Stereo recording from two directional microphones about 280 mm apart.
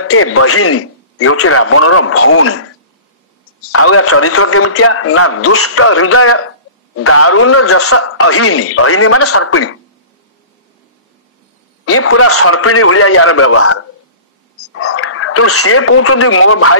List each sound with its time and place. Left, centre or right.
0.0 s a man's voice: left
3.7 s a man's voice: left
11.8 s a man's voice: left